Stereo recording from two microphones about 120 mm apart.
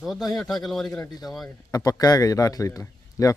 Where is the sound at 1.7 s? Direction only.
30° left (ahead or behind).